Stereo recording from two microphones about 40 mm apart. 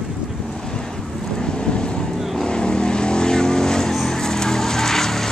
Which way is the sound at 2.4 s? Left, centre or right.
Left.